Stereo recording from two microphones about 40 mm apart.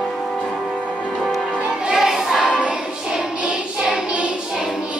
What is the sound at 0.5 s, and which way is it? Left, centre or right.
Music, centre.